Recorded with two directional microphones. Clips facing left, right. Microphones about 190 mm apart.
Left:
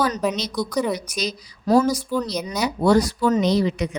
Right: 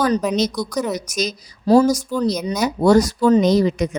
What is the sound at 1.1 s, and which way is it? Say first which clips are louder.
Speech: right 3 dB; 45° right (ahead or behind).